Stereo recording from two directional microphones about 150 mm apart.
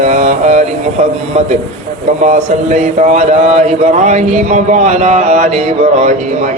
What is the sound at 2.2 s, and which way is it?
Mantra, 55° right (ahead or behind).